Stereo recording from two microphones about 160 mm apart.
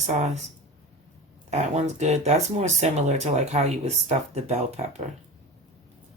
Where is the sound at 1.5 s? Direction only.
45° right (ahead or behind).